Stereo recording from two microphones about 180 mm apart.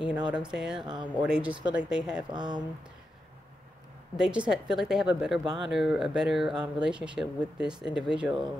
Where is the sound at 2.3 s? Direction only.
25° right (ahead or behind).